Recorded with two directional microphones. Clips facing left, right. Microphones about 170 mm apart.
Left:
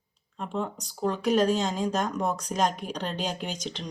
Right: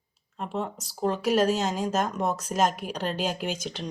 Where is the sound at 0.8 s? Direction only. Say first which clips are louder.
Right 1 dB; centre (ahead or behind).